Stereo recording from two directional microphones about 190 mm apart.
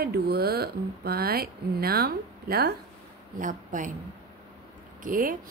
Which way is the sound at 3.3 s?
45° right (ahead or behind).